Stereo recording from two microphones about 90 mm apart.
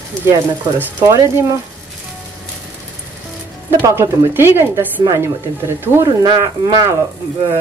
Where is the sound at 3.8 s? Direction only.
35° right (ahead or behind).